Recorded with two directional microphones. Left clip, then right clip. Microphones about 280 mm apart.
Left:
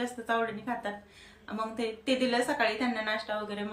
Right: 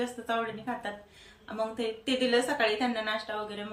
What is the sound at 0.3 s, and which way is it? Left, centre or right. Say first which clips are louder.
A woman's voice: left 3 dB; centre.